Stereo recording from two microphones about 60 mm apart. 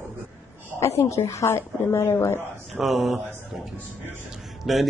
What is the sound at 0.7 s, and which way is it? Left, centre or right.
Speech, left.